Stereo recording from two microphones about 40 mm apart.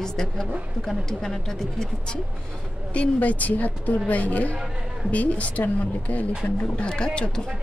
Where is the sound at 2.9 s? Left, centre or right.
Left.